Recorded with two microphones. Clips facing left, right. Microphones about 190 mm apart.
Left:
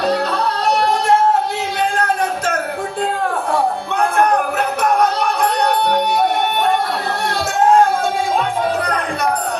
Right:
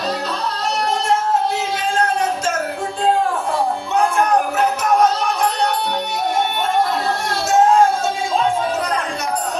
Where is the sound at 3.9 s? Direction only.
60° left (ahead or behind).